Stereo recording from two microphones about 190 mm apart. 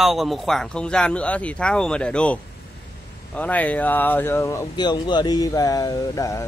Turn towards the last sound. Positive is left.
turn(degrees=15)  # may be behind; listen again after turning